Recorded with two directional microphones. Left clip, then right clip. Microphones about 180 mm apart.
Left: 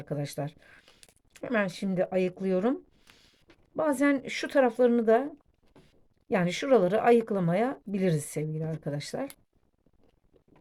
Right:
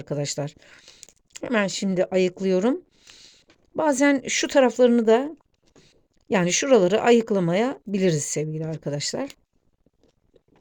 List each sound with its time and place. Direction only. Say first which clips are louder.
0.0 s speech: right 6 dB; 50° right (ahead or behind)